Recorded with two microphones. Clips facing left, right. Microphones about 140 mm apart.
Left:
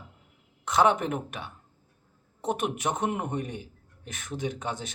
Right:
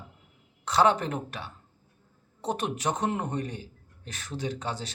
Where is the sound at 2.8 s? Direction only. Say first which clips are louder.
Even; 15° left (ahead or behind).